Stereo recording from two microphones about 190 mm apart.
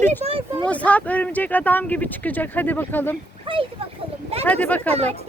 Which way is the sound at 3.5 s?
25° right (ahead or behind).